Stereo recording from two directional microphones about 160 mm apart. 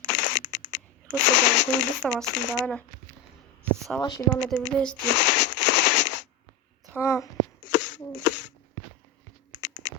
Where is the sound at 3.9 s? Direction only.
5° left (ahead or behind).